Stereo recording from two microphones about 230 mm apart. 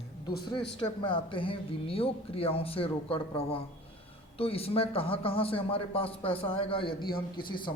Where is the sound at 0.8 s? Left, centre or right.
Left.